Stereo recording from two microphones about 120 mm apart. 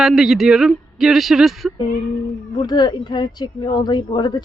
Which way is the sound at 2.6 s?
35° left (ahead or behind).